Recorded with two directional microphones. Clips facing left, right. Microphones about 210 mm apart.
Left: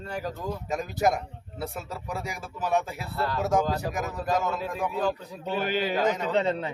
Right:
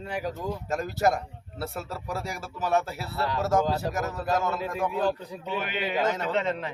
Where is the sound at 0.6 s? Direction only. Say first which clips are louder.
Even; centre (ahead or behind).